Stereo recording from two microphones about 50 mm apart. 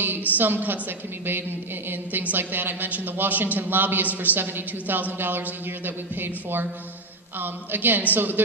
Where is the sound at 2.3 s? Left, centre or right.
Right.